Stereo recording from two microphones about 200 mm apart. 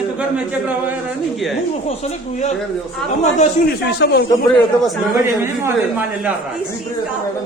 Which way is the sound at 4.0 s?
55° left (ahead or behind).